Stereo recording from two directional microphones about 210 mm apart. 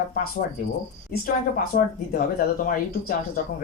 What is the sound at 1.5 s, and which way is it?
Speech, 40° left (ahead or behind).